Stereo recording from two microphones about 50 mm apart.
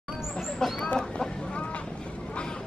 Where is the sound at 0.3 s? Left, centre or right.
Centre.